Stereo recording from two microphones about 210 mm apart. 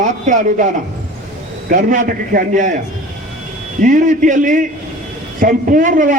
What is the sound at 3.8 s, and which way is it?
A man's voice, 40° right (ahead or behind).